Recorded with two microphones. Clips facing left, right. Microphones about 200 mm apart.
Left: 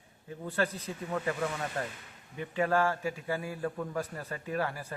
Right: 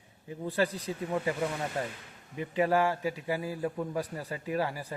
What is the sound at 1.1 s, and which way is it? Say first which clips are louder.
A man's voice: right 1 dB; 15° right (ahead or behind).